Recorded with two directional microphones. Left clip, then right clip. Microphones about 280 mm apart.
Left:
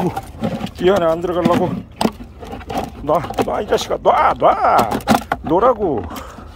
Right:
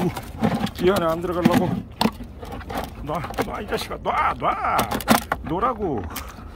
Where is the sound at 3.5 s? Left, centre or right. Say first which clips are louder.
Left 10 dB; centre.